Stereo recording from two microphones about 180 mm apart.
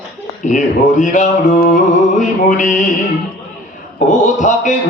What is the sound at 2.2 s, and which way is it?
Mantra, 45° left (ahead or behind).